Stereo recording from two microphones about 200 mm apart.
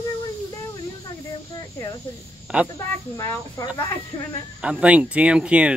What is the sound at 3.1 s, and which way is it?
Speech, 15° left (ahead or behind).